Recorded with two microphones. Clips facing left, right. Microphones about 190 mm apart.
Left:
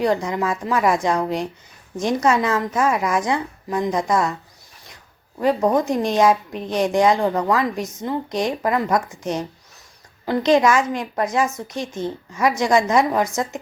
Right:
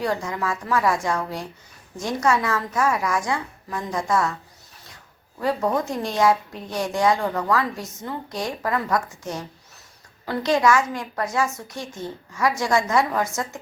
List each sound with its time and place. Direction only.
0.0 s a woman's voice: 20° left (ahead or behind)
5.4 s a woman's voice: 20° left (ahead or behind)